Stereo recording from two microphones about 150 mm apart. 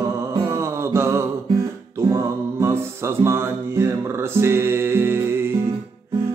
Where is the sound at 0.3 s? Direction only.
20° right (ahead or behind).